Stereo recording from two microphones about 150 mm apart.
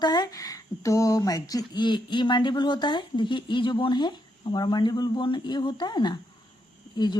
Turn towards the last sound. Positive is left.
turn(degrees=30)  # may be behind; listen again after turning